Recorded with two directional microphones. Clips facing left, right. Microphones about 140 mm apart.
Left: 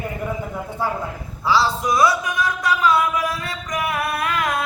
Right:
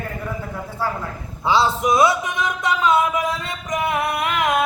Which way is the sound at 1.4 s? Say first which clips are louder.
Right 1 dB; 20° right (ahead or behind).